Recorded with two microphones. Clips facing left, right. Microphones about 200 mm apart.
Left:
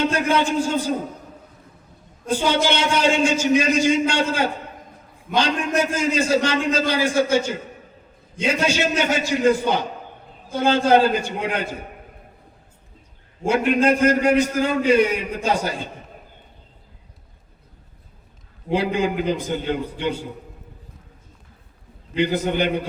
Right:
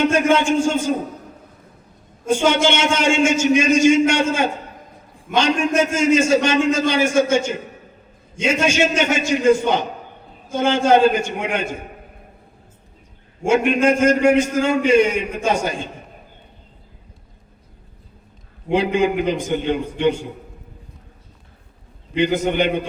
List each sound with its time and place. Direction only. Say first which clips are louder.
0.0 s a man's voice: right 4 dB; 20° right (ahead or behind)
2.3 s a man's voice: right 3 dB; 20° right (ahead or behind)
13.4 s a man's voice: right 2 dB; 20° right (ahead or behind)
18.7 s a man's voice: right 3 dB; 20° right (ahead or behind)
22.1 s a man's voice: right 2 dB; 20° right (ahead or behind)